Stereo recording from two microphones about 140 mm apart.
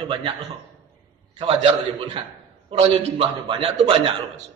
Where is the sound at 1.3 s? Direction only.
45° right (ahead or behind).